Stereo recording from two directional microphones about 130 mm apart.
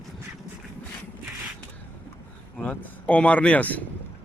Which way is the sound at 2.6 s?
10° left (ahead or behind).